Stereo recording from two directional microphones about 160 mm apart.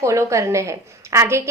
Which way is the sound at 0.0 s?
20° right (ahead or behind).